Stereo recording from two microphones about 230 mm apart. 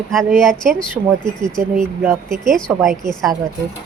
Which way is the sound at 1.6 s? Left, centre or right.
Right.